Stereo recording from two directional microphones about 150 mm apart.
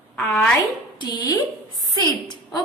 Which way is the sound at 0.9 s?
30° left (ahead or behind).